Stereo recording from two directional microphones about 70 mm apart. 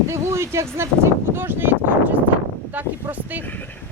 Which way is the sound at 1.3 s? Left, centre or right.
Right.